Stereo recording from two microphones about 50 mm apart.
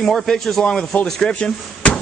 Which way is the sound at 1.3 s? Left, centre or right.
Left.